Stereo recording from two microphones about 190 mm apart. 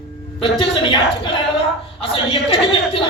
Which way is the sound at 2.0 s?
30° left (ahead or behind).